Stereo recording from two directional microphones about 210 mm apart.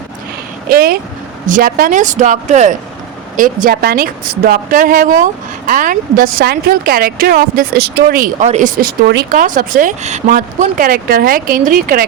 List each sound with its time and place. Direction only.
0.7 s vehicle: 45° right (ahead or behind)
1.5 s a woman's voice: 40° right (ahead or behind)